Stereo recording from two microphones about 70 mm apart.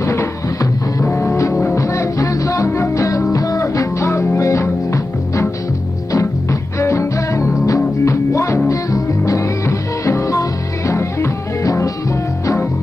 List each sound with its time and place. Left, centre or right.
0.0 s music: left